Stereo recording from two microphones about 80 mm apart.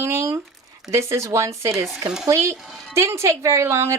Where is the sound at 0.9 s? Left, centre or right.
Right.